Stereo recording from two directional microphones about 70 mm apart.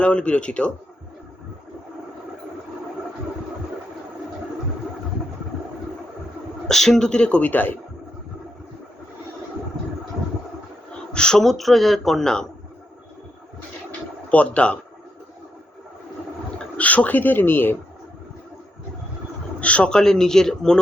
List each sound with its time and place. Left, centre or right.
0.0 s speech: centre
6.7 s speech: centre; by 7.8 s left
11.1 s speech: centre
14.3 s speech: centre
16.7 s speech: left
19.5 s speech: centre